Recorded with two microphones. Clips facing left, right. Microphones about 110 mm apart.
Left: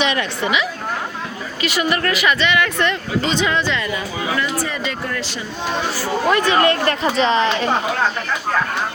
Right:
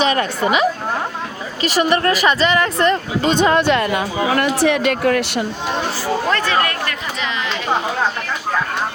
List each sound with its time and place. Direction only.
0.0 s speech: 40° right (ahead or behind); by 5.5 s 60° right (ahead or behind)
6.2 s speech: 15° left (ahead or behind)
6.8 s speech: 35° left (ahead or behind)